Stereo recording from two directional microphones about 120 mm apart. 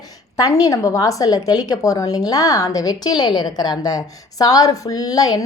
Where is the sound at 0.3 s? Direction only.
30° left (ahead or behind).